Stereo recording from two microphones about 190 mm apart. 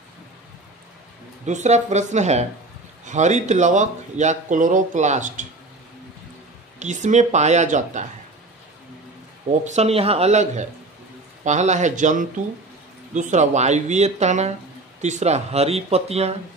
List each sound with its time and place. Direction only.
1.4 s speech: 40° right (ahead or behind)
6.8 s speech: 40° right (ahead or behind)
9.8 s speech: 30° right (ahead or behind)